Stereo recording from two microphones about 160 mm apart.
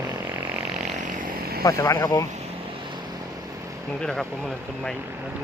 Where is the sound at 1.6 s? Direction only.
20° left (ahead or behind).